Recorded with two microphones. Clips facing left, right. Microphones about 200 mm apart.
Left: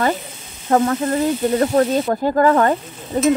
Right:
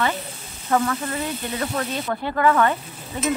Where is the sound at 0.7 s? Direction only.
40° left (ahead or behind).